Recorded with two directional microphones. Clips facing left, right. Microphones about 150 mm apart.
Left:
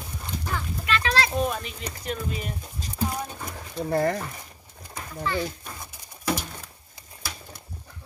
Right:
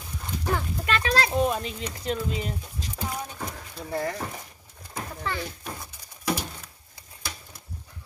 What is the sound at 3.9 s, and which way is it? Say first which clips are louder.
Speech: left 6 dB; 55° left (ahead or behind).